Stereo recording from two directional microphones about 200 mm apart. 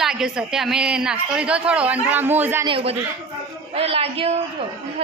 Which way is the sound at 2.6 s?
25° right (ahead or behind).